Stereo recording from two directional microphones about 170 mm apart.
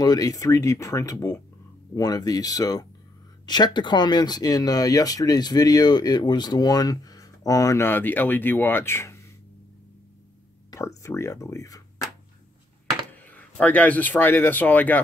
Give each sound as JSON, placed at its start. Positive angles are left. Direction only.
{"t": 0.0, "sound": "speech", "side_deg": 20}
{"t": 10.7, "sound": "speech", "side_deg": 20}
{"t": 13.1, "sound": "a sound", "side_deg": 10}
{"t": 13.6, "sound": "speech", "side_deg": 10}